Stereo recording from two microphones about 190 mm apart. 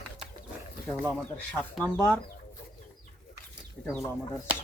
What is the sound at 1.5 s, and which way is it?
Speech, 10° left (ahead or behind).